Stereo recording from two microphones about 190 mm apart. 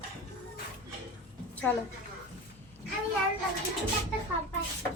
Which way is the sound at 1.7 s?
5° left (ahead or behind).